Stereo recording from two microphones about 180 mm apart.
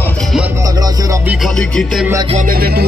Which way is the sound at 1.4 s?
5° left (ahead or behind).